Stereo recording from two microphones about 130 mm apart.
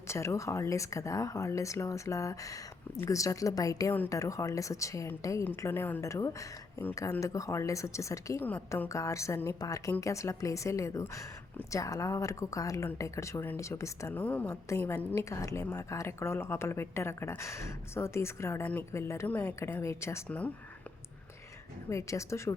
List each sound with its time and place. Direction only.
0.1 s speech: 20° left (ahead or behind)
8.4 s a woman's voice: 15° left (ahead or behind)
8.9 s speech: 25° left (ahead or behind)
21.8 s speech: 25° left (ahead or behind)